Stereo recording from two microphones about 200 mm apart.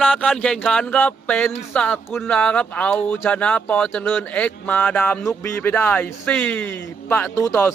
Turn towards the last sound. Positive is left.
turn(degrees=10)  # may be behind; listen again after turning